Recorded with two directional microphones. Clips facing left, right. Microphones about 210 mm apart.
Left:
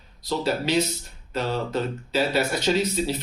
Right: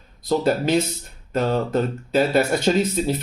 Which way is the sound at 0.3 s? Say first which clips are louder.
Right 5 dB; 50° right (ahead or behind).